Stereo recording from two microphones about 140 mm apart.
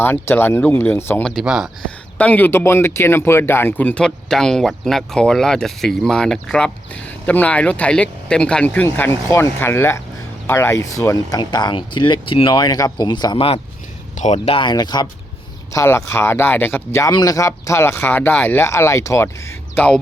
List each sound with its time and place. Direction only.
0.0 s speech: 15° left (ahead or behind); by 1.7 s 5° right (ahead or behind)
2.1 s speech: 10° left (ahead or behind); by 13.6 s 35° left (ahead or behind)
14.2 s speech: 50° left (ahead or behind); by 15.0 s 30° left (ahead or behind)
15.7 s speech: 20° left (ahead or behind)
17.1 s speech: 30° left (ahead or behind); by 20.0 s 10° left (ahead or behind)